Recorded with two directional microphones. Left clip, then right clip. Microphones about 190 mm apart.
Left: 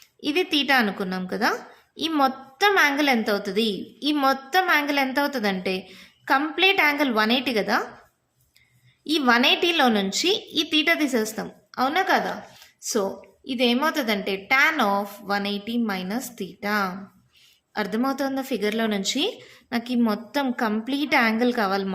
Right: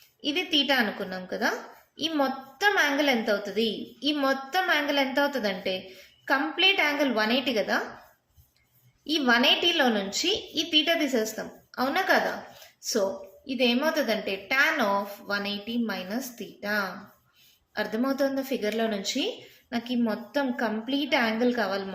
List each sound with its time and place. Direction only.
0.2 s a woman's voice: 40° left (ahead or behind)
9.0 s a woman's voice: 40° left (ahead or behind)